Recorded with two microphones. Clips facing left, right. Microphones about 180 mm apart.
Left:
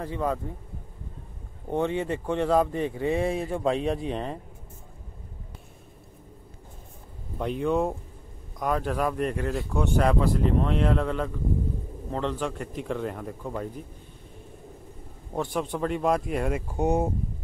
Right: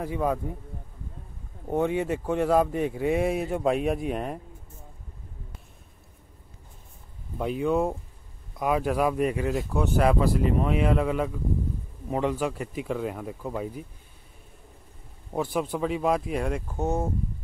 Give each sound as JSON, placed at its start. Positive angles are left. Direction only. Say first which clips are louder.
{"t": 0.0, "sound": "speech", "louder": "right 2 dB", "side_deg": -10}
{"t": 1.7, "sound": "speech", "louder": "right 1 dB", "side_deg": -10}
{"t": 7.3, "sound": "speech", "louder": "right 1 dB", "side_deg": -5}
{"t": 15.3, "sound": "speech", "louder": "right 1 dB", "side_deg": -5}
{"t": 16.6, "sound": "speech", "louder": "left 3 dB", "side_deg": 15}